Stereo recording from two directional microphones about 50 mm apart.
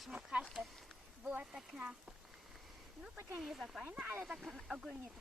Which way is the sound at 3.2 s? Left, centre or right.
Right.